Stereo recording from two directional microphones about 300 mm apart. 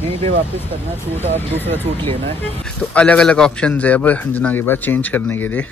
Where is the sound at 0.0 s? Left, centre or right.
Centre.